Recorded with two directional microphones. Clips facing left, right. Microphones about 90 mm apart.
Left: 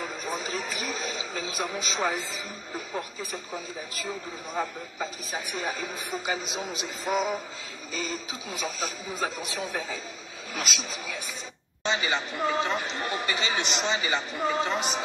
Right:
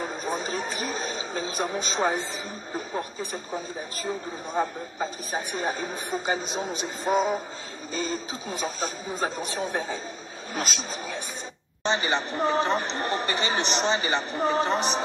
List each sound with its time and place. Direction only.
0.0 s speech: 40° right (ahead or behind)